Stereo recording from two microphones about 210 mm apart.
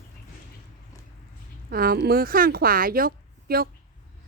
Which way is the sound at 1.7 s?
45° right (ahead or behind).